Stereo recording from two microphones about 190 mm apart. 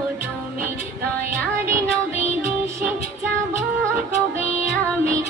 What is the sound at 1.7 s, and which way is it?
Music, 15° right (ahead or behind).